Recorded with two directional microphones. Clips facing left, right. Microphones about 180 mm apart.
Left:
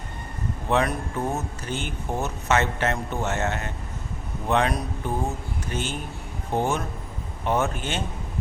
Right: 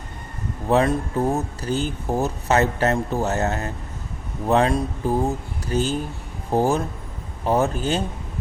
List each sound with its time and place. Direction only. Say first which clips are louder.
0.7 s speech: right 5 dB; 35° right (ahead or behind)